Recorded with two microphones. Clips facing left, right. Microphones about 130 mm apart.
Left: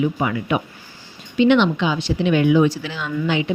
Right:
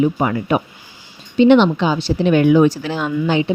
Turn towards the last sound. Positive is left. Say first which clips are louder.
# right 4 dB
turn(degrees=-35)  # may be behind; listen again after turning